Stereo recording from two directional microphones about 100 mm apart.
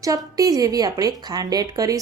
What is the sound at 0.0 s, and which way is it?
A woman's voice, 35° right (ahead or behind).